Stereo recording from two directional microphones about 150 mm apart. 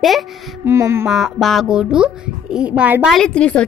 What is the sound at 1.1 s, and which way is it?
A woman's voice, centre (ahead or behind).